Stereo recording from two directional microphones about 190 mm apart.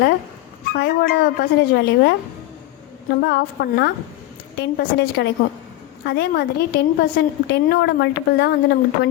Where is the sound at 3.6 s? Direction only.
60° left (ahead or behind).